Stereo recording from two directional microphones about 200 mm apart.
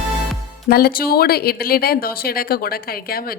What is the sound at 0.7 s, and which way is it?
Speech, 45° left (ahead or behind).